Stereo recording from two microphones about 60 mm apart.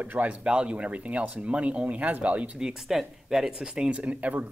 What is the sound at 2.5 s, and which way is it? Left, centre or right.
Speech, centre.